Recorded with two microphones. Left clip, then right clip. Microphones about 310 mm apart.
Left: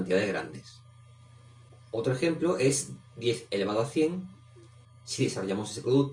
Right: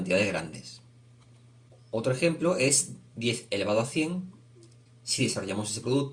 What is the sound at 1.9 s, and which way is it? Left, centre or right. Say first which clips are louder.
Speech: right 2 dB; right.